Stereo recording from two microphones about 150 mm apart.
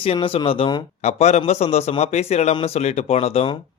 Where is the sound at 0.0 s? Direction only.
40° left (ahead or behind).